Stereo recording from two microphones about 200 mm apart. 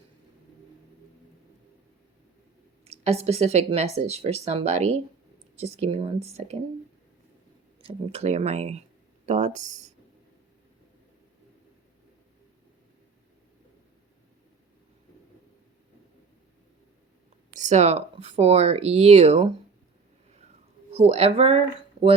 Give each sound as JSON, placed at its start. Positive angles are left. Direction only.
{"t": 2.8, "sound": "speech", "side_deg": -30}
{"t": 7.8, "sound": "speech", "side_deg": -25}
{"t": 17.5, "sound": "speech", "side_deg": -35}
{"t": 20.9, "sound": "speech", "side_deg": -30}